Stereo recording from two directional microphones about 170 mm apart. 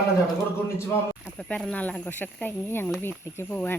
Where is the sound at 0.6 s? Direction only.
15° left (ahead or behind).